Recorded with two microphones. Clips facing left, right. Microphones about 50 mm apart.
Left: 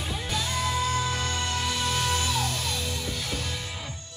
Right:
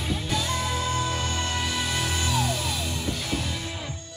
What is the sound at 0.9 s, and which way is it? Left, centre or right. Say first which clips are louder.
Music: right 1 dB; right.